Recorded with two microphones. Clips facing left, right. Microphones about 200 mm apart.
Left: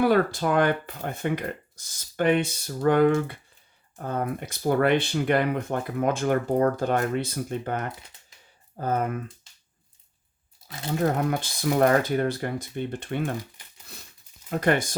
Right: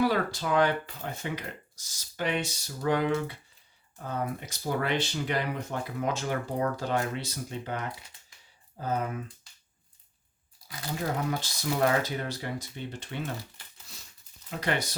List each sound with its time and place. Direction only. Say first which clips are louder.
0.0 s speech: left 6 dB; 55° left (ahead or behind)
10.7 s speech: left 5 dB; 25° left (ahead or behind)
11.0 s speech: left 6 dB; 55° left (ahead or behind)
14.5 s speech: left 7 dB; 50° left (ahead or behind)